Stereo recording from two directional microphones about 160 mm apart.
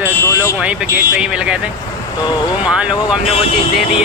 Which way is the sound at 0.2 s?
15° left (ahead or behind).